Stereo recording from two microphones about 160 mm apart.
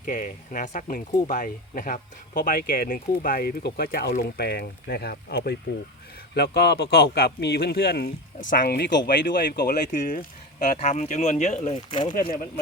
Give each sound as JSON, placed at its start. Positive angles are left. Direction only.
{"t": 0.0, "sound": "speech", "side_deg": 55}
{"t": 6.3, "sound": "a man's voice", "side_deg": 90}
{"t": 8.4, "sound": "speech", "side_deg": 65}
{"t": 10.7, "sound": "speech", "side_deg": 45}
{"t": 12.1, "sound": "speech", "side_deg": 70}